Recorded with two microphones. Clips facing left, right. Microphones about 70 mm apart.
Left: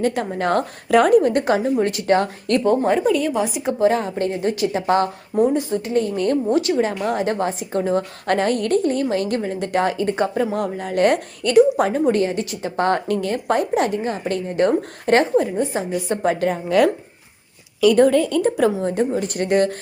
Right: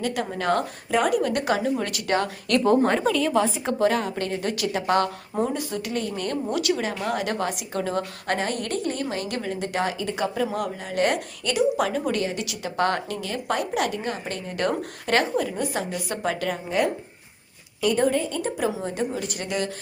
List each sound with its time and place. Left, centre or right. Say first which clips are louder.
0.0 s a woman's voice: left 5 dB; left
2.6 s a woman's voice: left 3 dB; centre
3.8 s a woman's voice: left 5 dB; left
8.3 s a woman's voice: left 9 dB; left
16.6 s speech: left 8 dB; left
17.9 s a woman's voice: left 6 dB; left
18.8 s a woman's voice: left 7 dB; left